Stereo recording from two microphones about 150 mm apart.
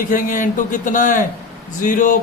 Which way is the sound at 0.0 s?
65° left (ahead or behind).